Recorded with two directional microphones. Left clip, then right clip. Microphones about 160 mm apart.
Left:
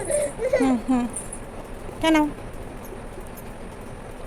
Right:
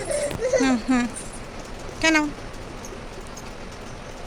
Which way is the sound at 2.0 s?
15° left (ahead or behind).